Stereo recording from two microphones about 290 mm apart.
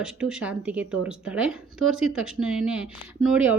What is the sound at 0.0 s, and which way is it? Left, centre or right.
Speech, centre.